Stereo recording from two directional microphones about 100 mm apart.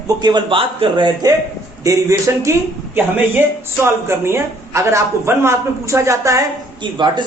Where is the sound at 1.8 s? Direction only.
30° right (ahead or behind).